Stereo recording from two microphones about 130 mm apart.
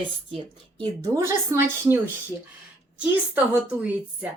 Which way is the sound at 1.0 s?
25° right (ahead or behind).